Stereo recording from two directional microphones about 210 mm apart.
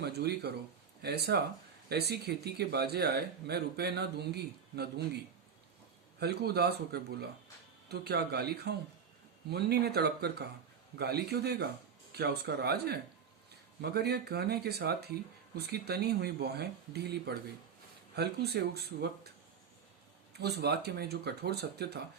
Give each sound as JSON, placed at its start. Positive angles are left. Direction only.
{"t": 0.0, "sound": "speech", "side_deg": -50}
{"t": 6.1, "sound": "speech", "side_deg": -50}
{"t": 20.3, "sound": "speech", "side_deg": -50}